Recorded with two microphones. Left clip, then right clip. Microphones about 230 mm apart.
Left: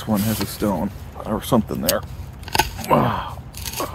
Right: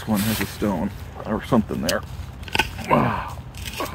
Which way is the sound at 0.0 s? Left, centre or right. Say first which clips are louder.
Left 1 dB; centre.